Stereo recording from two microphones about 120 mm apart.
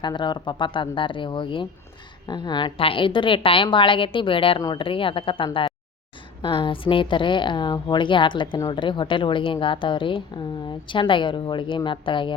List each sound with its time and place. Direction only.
0.0 s a woman's voice: 40° left (ahead or behind)